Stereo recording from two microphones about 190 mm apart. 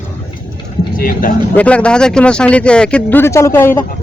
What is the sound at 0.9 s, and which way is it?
Speech, 50° left (ahead or behind).